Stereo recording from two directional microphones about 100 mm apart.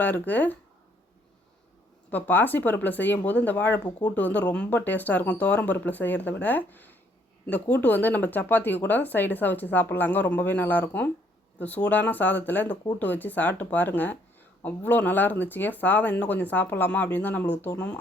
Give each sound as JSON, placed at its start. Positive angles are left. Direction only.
{"t": 0.0, "sound": "speech", "side_deg": 15}
{"t": 2.0, "sound": "speech", "side_deg": 15}